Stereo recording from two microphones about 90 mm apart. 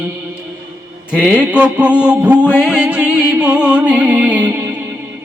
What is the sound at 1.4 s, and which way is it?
Mantra, 10° right (ahead or behind).